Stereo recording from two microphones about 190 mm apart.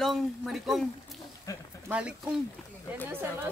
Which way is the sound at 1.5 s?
15° left (ahead or behind).